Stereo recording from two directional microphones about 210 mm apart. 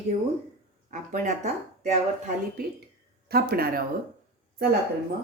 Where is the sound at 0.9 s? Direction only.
35° right (ahead or behind).